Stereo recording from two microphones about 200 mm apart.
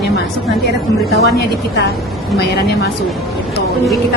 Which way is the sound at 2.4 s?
55° left (ahead or behind).